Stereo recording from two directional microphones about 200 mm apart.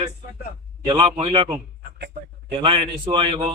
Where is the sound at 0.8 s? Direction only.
20° right (ahead or behind).